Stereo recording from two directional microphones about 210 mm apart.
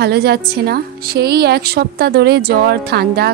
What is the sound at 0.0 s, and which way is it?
A woman's voice, 50° right (ahead or behind).